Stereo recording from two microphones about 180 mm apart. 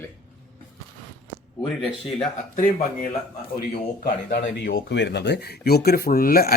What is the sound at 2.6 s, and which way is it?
Speech, 50° left (ahead or behind).